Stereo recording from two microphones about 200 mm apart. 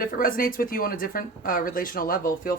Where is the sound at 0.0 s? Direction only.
45° left (ahead or behind).